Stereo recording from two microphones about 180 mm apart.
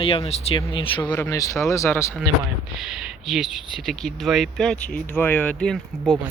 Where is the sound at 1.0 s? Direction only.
10° left (ahead or behind).